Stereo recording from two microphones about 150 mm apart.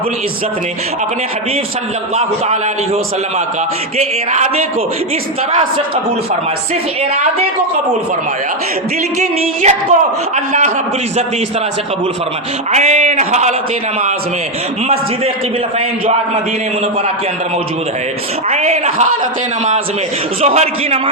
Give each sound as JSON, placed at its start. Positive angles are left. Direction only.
{"t": 2.1, "sound": "a man's voice", "side_deg": -45}
{"t": 9.1, "sound": "a man's voice", "side_deg": -50}
{"t": 12.7, "sound": "a man's voice", "side_deg": -50}
{"t": 18.4, "sound": "a man's voice", "side_deg": -45}
{"t": 20.4, "sound": "a man's voice", "side_deg": -45}